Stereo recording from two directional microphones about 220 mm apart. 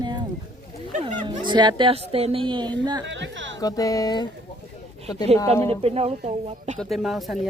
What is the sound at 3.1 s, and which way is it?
Speech, 55° right (ahead or behind).